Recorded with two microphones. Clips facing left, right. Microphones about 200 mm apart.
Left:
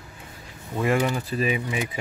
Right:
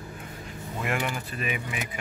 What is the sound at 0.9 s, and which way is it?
Speech, 30° left (ahead or behind).